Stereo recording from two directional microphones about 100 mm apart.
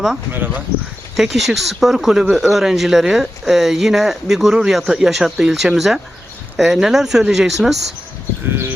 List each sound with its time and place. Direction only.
0.3 s speech: 20° right (ahead or behind)
1.1 s speech: centre (ahead or behind)